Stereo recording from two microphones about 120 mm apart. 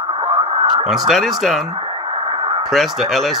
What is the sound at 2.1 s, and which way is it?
Radio, 45° right (ahead or behind).